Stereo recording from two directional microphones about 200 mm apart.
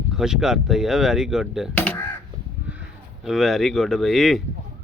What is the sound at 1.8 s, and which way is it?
Crow, 10° left (ahead or behind).